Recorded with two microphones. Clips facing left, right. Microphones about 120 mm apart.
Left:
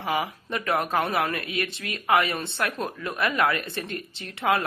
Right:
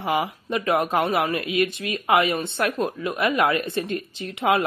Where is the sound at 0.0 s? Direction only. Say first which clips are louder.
Right 3 dB; 15° right (ahead or behind).